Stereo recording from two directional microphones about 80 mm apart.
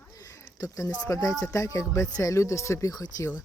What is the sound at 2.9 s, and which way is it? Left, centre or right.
Speech, left.